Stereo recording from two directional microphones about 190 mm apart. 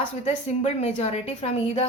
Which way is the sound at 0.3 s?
35° left (ahead or behind).